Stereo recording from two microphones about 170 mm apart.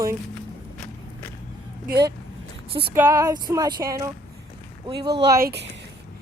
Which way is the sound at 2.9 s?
15° right (ahead or behind).